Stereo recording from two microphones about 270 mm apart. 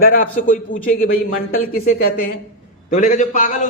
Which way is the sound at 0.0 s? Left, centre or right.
Left.